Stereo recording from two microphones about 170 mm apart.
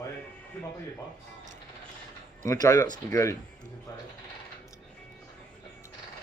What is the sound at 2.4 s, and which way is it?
Speech, 20° left (ahead or behind).